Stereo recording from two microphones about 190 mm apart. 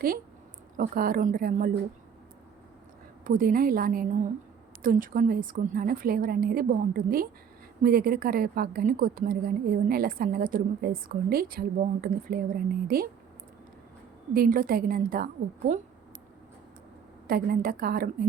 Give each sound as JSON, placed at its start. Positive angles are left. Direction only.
{"t": 0.8, "sound": "a woman's voice", "side_deg": -50}
{"t": 3.2, "sound": "a woman's voice", "side_deg": -50}
{"t": 14.3, "sound": "a woman's voice", "side_deg": -50}
{"t": 17.2, "sound": "a woman's voice", "side_deg": -50}